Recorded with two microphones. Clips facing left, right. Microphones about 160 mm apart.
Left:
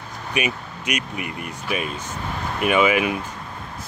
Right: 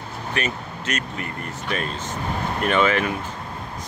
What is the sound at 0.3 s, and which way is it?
Speech, 10° left (ahead or behind).